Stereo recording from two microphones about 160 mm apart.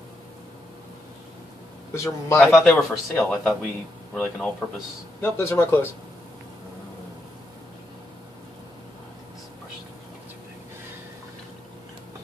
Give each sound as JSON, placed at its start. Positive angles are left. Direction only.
{"t": 2.0, "sound": "a man's voice", "side_deg": 20}
{"t": 2.4, "sound": "speech", "side_deg": 0}
{"t": 5.2, "sound": "speech", "side_deg": 15}